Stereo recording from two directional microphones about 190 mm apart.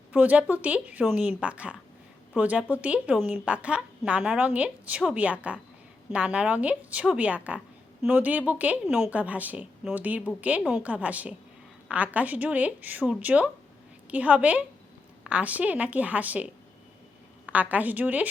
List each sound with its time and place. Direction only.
0.1 s a woman's voice: 5° right (ahead or behind)